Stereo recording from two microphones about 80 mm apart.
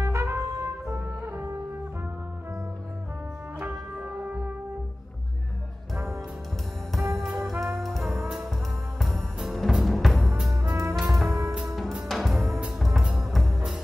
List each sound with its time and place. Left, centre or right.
0.0 s brass instrument: right
3.5 s music: right
6.9 s brass instrument: centre
9.0 s music: centre
10.5 s music: right
11.0 s music: centre